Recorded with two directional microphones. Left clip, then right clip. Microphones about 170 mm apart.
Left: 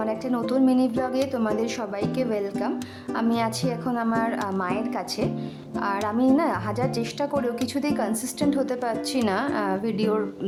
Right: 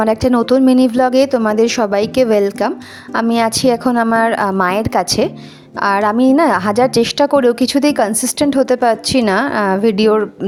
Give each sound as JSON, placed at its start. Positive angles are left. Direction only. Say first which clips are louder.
{"t": 0.0, "sound": "a woman's voice", "louder": "right 13 dB", "side_deg": -50}